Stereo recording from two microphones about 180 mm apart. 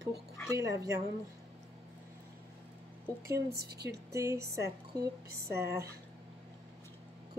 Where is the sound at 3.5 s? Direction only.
65° right (ahead or behind).